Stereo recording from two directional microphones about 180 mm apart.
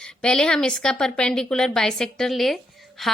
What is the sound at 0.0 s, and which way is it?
A woman's voice, 5° left (ahead or behind).